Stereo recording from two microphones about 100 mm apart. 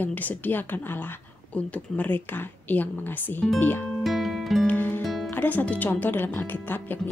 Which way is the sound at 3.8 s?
5° left (ahead or behind).